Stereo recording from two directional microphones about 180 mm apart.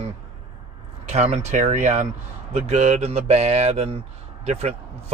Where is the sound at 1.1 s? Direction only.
35° right (ahead or behind).